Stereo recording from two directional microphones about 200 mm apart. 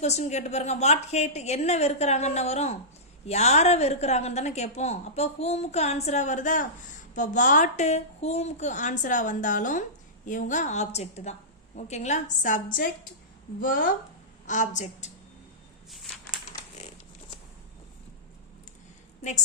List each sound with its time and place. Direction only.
0.0 s a woman's voice: 35° left (ahead or behind)